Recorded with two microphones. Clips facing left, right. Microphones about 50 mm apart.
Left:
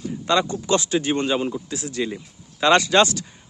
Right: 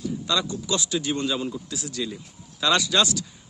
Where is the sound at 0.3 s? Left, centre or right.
Left.